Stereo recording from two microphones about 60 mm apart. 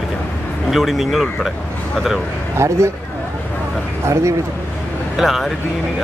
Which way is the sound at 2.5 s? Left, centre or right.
Right.